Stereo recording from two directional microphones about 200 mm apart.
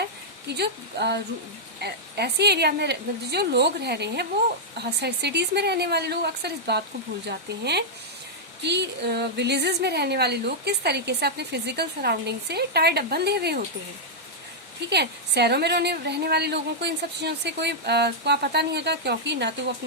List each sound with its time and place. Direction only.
0.4 s a woman's voice: 55° right (ahead or behind)
14.8 s a woman's voice: 55° right (ahead or behind)